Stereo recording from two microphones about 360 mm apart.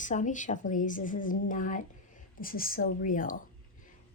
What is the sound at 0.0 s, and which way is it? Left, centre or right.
A woman's voice, left.